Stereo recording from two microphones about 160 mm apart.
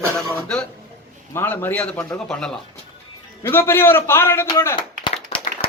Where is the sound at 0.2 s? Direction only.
5° left (ahead or behind).